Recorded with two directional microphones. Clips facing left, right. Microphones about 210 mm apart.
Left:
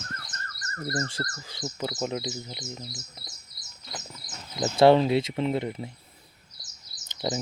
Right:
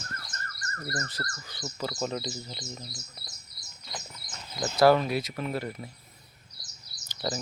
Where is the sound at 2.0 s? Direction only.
15° left (ahead or behind).